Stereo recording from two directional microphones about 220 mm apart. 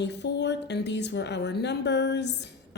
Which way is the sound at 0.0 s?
50° left (ahead or behind).